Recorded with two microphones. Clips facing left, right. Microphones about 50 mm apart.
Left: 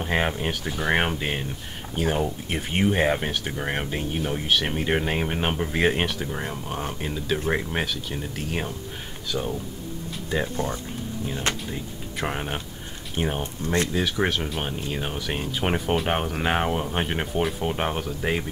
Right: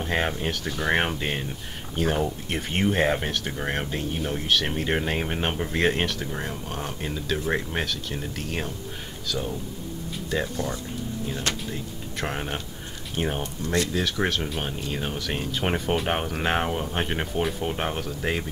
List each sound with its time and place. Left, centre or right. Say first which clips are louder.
0.0 s speech: left 1 dB; centre
9.3 s speech: left 2 dB; centre
10.5 s speech: left 2 dB; left
11.7 s speech: left 1 dB; centre
13.6 s speech: left 3 dB; left
13.9 s speech: left 1 dB; centre